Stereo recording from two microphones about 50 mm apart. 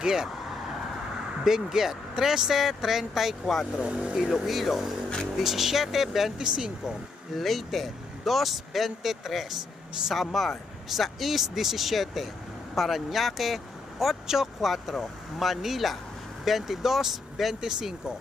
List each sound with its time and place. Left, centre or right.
0.0 s speech: centre
1.5 s speech: centre
3.8 s speech: centre
4.3 s speech: centre
7.3 s speech: centre